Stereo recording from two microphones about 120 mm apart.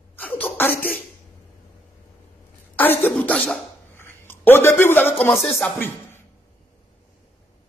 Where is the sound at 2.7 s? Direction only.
15° left (ahead or behind).